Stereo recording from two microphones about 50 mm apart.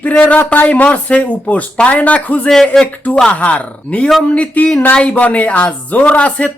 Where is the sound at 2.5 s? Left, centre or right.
Centre.